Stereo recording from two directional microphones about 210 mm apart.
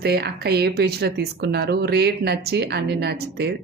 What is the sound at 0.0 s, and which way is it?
Speech, 50° right (ahead or behind).